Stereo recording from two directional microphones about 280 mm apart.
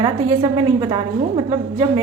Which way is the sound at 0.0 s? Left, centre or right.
Centre.